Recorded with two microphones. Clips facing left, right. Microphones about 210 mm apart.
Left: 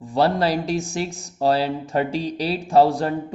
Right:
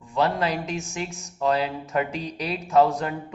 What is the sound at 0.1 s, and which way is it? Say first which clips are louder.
Speech: left 4 dB; 35° left (ahead or behind).